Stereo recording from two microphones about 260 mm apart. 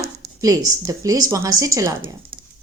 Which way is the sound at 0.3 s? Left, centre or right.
Centre.